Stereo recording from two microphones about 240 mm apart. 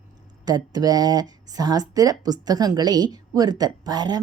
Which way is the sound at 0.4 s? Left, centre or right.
Centre.